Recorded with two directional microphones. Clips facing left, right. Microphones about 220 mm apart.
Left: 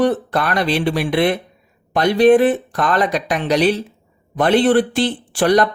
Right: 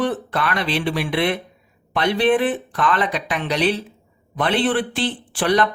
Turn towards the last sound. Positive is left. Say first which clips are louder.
# left 4 dB
turn(degrees=40)  # may be behind; listen again after turning